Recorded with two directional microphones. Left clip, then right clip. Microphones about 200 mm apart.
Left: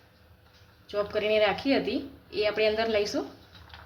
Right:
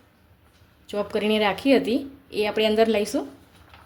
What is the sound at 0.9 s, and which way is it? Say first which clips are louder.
Speech: right 2 dB; 60° right (ahead or behind).